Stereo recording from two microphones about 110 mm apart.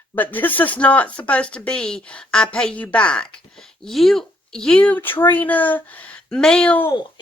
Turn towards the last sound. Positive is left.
turn(degrees=10)  # may be behind; listen again after turning